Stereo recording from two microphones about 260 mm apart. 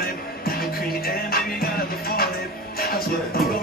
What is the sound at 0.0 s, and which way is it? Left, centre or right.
Music, left.